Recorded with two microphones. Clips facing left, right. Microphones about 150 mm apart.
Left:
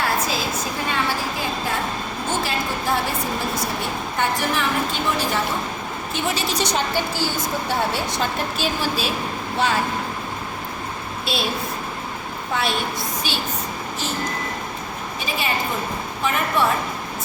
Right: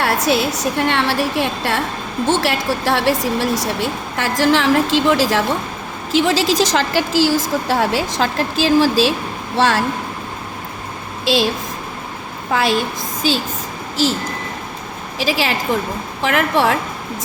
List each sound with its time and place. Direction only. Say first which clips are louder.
0.0 s a woman's voice: right 6 dB; 75° right (ahead or behind)
11.3 s a woman's voice: right 9 dB; 90° right
12.5 s a woman's voice: right 7 dB; 90° right
13.9 s a woman's voice: right 13 dB; 90° right
15.2 s a woman's voice: right 6 dB; 90° right